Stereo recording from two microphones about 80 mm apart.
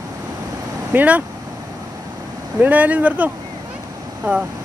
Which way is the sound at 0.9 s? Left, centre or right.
Centre.